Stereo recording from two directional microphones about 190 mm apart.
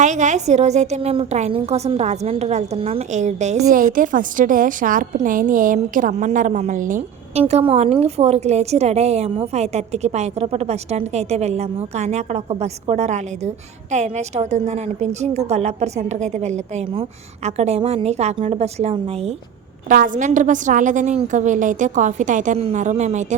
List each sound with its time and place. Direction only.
0.0 s a woman's voice: 40° right (ahead or behind)
19.9 s a woman's voice: 45° right (ahead or behind)